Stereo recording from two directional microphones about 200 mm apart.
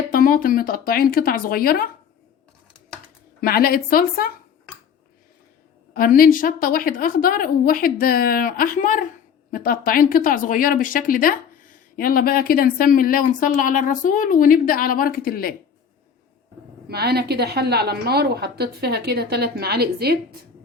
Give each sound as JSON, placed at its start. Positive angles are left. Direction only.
{"t": 0.1, "sound": "speech", "side_deg": 45}
{"t": 3.4, "sound": "speech", "side_deg": 50}
{"t": 5.9, "sound": "speech", "side_deg": 45}
{"t": 16.9, "sound": "a woman's voice", "side_deg": -50}